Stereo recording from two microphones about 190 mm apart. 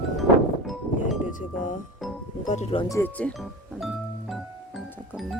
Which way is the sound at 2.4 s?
35° left (ahead or behind).